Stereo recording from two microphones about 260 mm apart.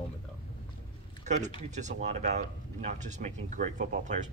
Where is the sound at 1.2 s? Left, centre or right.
Right.